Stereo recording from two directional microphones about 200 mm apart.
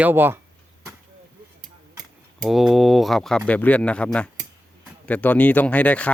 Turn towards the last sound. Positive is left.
turn(degrees=10)  # may be behind; listen again after turning